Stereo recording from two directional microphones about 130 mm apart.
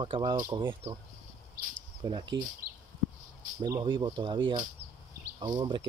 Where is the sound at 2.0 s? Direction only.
35° right (ahead or behind).